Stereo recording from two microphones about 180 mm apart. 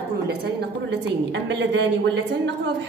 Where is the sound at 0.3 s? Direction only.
65° right (ahead or behind); by 2.5 s 80° right.